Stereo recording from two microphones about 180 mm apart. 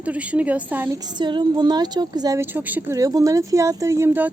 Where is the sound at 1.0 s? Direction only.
25° right (ahead or behind).